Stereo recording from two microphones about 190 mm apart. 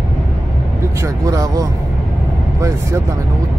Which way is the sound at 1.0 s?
15° right (ahead or behind).